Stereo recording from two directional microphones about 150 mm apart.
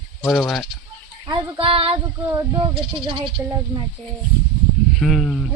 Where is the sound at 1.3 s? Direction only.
35° right (ahead or behind).